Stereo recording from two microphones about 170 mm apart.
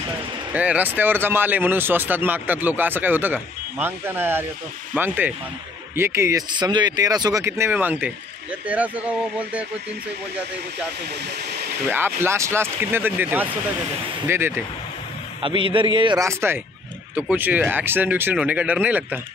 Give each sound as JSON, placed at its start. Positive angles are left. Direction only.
{"t": 0.5, "sound": "speech", "side_deg": -10}
{"t": 11.9, "sound": "speech", "side_deg": -15}
{"t": 15.4, "sound": "a man's voice", "side_deg": -30}
{"t": 16.2, "sound": "speech", "side_deg": -15}